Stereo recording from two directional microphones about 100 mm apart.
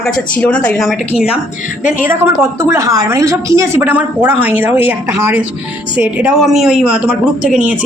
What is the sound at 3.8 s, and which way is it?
Speech, 15° right (ahead or behind).